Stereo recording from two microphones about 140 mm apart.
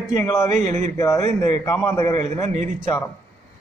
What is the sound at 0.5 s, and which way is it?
Speech, 60° right (ahead or behind).